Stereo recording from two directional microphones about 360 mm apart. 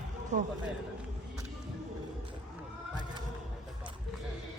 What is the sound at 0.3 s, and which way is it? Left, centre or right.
Speech, centre.